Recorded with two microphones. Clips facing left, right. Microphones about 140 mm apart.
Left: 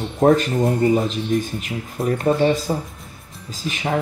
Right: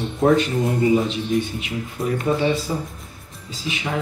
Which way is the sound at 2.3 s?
45° left (ahead or behind).